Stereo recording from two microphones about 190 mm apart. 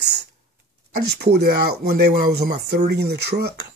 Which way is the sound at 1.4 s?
55° right (ahead or behind).